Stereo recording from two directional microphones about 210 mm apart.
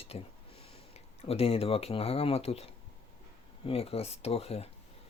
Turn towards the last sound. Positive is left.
turn(degrees=30)  # may be behind; listen again after turning